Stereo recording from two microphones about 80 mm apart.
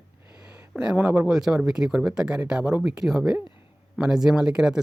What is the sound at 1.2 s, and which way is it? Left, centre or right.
Speech, centre.